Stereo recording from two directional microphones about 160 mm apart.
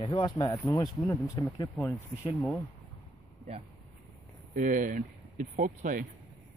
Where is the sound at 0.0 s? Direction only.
30° left (ahead or behind).